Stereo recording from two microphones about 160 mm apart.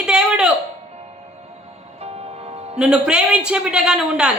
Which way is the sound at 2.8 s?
5° right (ahead or behind).